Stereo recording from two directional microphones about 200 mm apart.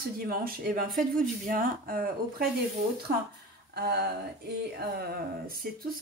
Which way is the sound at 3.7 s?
50° right (ahead or behind).